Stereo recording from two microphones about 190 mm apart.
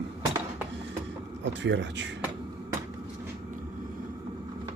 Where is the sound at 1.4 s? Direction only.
70° right (ahead or behind).